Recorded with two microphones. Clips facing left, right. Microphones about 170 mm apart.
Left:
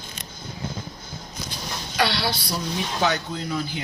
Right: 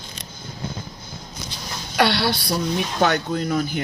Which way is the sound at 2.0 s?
55° right (ahead or behind).